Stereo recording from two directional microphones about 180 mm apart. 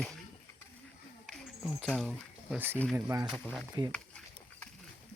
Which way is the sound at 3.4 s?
5° right (ahead or behind).